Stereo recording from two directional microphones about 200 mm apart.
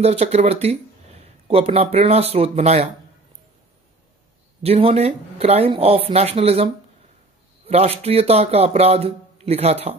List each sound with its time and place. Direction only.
0.0 s speech: 35° right (ahead or behind)
4.6 s speech: 30° right (ahead or behind)